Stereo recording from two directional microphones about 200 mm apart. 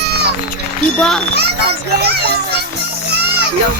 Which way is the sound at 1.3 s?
55° right (ahead or behind).